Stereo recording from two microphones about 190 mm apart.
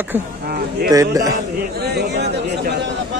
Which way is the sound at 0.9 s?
20° right (ahead or behind).